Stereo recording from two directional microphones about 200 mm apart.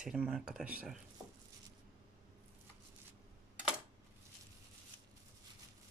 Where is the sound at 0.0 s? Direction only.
5° right (ahead or behind).